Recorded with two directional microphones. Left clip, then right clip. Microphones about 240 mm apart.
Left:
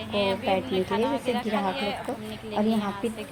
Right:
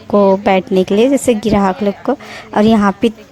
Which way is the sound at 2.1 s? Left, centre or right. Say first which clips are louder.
Right 14 dB; right.